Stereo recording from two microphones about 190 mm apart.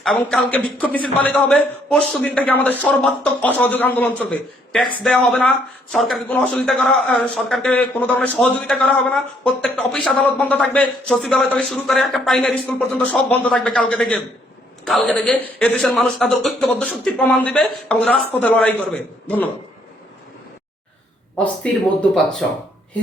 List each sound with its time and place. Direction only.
0.0 s a man's voice: 5° left (ahead or behind)
21.3 s a man's voice: 5° left (ahead or behind)